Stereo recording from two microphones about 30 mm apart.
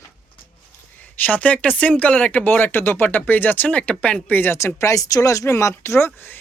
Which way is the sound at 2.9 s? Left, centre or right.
Left.